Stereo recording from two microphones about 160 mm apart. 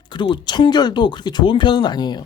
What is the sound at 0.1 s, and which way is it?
Speech, 30° left (ahead or behind).